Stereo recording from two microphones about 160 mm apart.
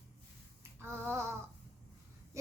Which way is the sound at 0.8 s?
15° right (ahead or behind).